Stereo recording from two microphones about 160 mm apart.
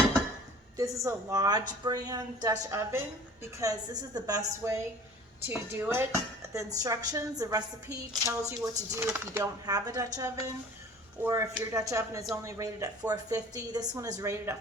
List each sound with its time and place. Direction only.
0.8 s a woman's voice: 20° right (ahead or behind)
5.5 s a woman's voice: 10° right (ahead or behind)